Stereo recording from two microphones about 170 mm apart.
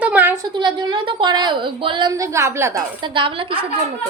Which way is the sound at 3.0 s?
30° right (ahead or behind).